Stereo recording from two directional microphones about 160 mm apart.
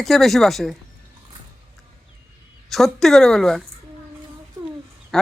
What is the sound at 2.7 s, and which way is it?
Speech, centre (ahead or behind).